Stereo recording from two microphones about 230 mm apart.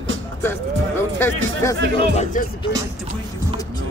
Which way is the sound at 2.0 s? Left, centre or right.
Left.